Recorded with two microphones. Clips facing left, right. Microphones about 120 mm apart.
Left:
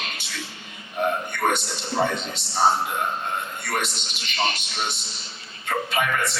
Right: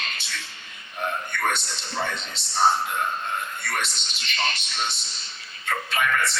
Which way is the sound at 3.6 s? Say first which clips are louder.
Left 4 dB; 10° left (ahead or behind).